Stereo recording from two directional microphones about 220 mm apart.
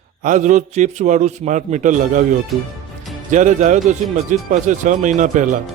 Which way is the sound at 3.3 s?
35° right (ahead or behind).